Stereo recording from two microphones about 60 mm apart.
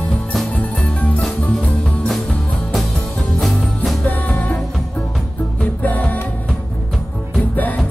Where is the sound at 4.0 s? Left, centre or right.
Left.